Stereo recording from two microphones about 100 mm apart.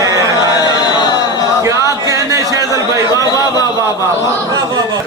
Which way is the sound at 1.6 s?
35° right (ahead or behind).